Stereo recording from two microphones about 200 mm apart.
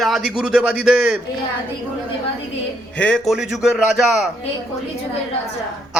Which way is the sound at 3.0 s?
Centre (ahead or behind).